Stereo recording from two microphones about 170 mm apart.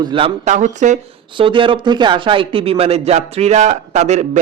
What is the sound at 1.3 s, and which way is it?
A man's voice, 30° right (ahead or behind).